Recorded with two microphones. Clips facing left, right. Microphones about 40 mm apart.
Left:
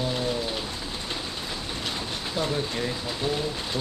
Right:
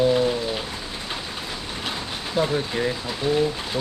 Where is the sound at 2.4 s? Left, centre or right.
Right.